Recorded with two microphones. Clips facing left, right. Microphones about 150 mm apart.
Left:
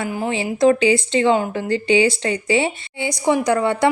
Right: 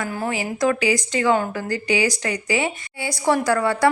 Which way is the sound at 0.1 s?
15° left (ahead or behind).